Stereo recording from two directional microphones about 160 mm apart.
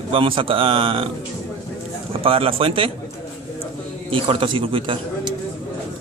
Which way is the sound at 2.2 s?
35° right (ahead or behind).